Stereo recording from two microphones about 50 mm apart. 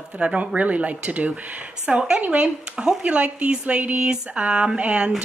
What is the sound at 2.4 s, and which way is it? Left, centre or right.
A woman's voice, centre.